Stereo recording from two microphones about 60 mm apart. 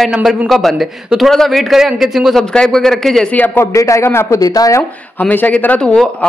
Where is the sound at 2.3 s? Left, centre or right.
Centre.